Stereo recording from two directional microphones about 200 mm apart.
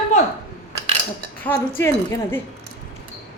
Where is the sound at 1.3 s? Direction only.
10° left (ahead or behind).